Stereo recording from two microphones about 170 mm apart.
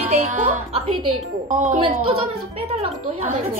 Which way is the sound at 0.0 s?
40° right (ahead or behind).